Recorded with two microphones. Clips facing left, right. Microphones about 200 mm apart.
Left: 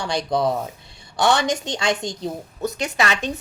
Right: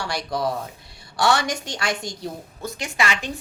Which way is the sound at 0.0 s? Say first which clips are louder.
Left 4 dB; 20° left (ahead or behind).